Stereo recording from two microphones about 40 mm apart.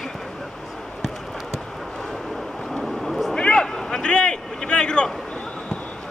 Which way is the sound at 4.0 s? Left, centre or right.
Left.